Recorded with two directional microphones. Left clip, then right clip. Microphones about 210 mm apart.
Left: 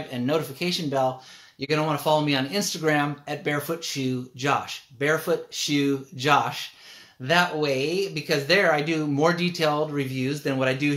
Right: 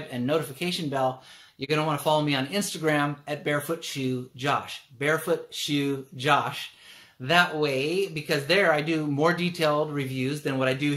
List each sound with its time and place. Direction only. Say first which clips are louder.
0.1 s speech: left 1 dB; 5° left (ahead or behind)
7.2 s speech: even; centre (ahead or behind)